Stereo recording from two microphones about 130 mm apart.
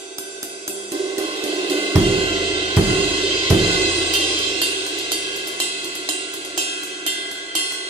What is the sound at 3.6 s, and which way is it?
Music, 40° right (ahead or behind).